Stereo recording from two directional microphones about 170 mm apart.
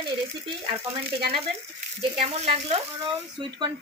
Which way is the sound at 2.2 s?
35° right (ahead or behind).